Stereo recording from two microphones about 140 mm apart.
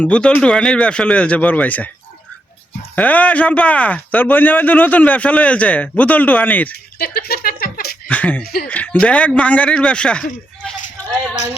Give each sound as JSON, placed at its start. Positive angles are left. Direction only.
{"t": 0.0, "sound": "speech", "side_deg": 10}
{"t": 2.9, "sound": "speech", "side_deg": 10}
{"t": 7.0, "sound": "speech", "side_deg": 90}
{"t": 8.0, "sound": "speech", "side_deg": 10}